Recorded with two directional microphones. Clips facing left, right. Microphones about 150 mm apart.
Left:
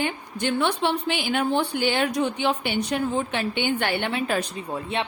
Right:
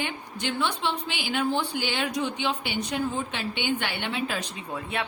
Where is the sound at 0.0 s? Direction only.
50° left (ahead or behind).